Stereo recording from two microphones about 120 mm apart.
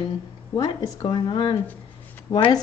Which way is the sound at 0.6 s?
30° left (ahead or behind).